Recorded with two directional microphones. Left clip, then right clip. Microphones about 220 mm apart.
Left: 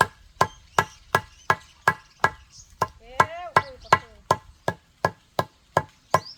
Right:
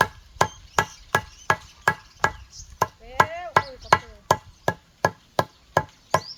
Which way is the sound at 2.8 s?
5° left (ahead or behind).